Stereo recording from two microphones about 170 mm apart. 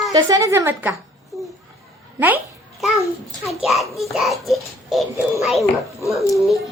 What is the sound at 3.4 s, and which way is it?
A child's voice, centre (ahead or behind).